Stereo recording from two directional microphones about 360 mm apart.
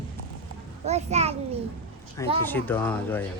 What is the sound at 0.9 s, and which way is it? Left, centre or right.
Speech, centre.